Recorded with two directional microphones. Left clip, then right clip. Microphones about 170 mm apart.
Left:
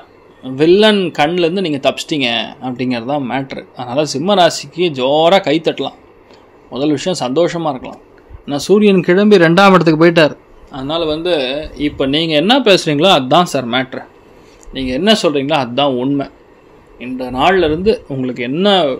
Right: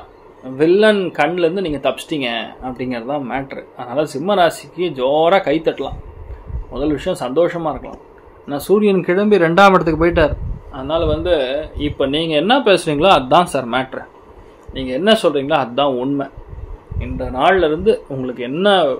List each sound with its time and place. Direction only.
0.4 s speech: 50° left (ahead or behind); by 14.0 s 35° left (ahead or behind)
14.7 s speech: 55° left (ahead or behind); by 16.3 s 35° left (ahead or behind)
17.0 s speech: 60° left (ahead or behind)